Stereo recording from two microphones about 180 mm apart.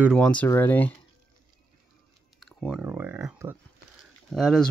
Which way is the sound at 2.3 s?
Centre (ahead or behind).